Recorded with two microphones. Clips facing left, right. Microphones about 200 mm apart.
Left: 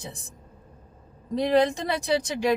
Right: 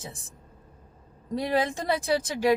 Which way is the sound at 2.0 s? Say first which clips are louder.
Left 1 dB; 50° right (ahead or behind).